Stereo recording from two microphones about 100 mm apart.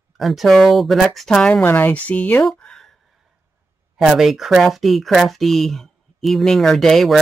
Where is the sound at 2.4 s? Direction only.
5° left (ahead or behind).